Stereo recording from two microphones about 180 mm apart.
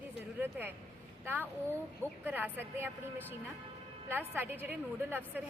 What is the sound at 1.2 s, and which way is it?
A woman's voice, 10° right (ahead or behind).